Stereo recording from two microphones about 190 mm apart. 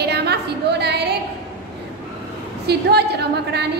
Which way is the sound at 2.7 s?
60° right (ahead or behind).